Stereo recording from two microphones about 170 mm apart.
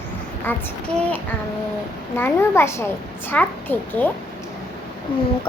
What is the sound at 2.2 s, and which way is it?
Speech, 15° left (ahead or behind).